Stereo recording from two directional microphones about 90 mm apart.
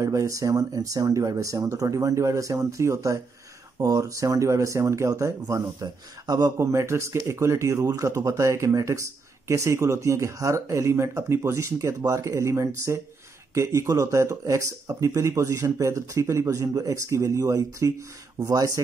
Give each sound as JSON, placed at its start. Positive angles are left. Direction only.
{"t": 0.0, "sound": "speech", "side_deg": -35}